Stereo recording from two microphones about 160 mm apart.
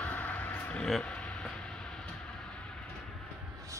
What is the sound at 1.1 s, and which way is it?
Vehicle, 5° left (ahead or behind).